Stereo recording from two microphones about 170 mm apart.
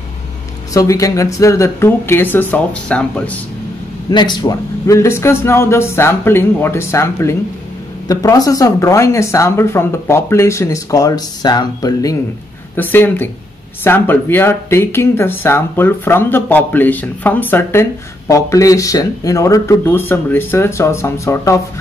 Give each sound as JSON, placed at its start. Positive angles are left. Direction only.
{"t": 0.7, "sound": "speech", "side_deg": 20}
{"t": 4.1, "sound": "speech", "side_deg": 25}